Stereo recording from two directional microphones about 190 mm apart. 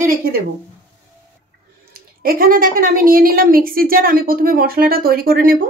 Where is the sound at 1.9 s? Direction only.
50° right (ahead or behind).